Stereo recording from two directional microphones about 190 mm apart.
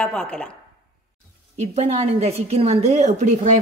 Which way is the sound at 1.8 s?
35° right (ahead or behind).